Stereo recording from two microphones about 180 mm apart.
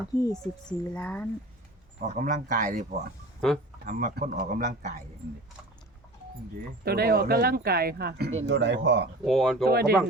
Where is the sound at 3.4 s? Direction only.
5° left (ahead or behind).